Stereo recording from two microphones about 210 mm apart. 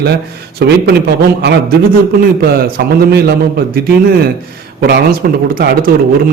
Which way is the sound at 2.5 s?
50° right (ahead or behind).